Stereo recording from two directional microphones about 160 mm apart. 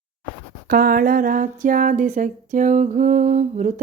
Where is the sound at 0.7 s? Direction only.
65° right (ahead or behind).